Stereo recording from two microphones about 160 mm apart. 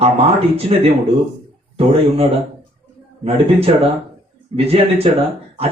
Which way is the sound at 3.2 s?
40° right (ahead or behind).